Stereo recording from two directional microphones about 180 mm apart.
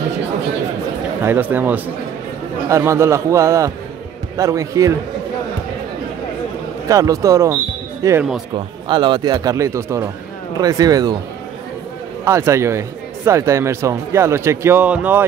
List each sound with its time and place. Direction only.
1.2 s speech: 10° right (ahead or behind)
6.9 s speech: 20° right (ahead or behind)
8.5 s speech: 25° right (ahead or behind)
12.3 s speech: 15° right (ahead or behind)